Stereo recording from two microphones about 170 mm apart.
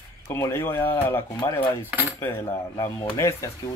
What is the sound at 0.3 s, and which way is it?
A man's voice, 15° left (ahead or behind).